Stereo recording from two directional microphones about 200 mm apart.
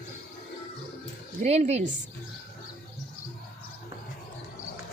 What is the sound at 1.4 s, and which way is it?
Speech, 35° right (ahead or behind).